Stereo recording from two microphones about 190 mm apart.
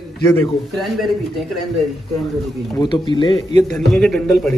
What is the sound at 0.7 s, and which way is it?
Speech, centre (ahead or behind).